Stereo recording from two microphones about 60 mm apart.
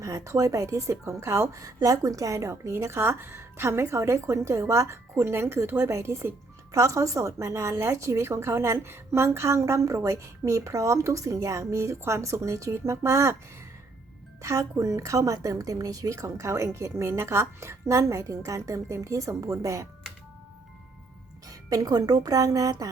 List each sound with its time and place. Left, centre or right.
0.0 s a woman's voice: right
6.7 s a woman's voice: right
14.4 s a woman's voice: right
21.4 s speech: right